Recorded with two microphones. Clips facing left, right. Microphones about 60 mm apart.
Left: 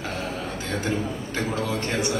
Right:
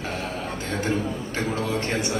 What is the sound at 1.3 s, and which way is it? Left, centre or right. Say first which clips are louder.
Speech: even; right.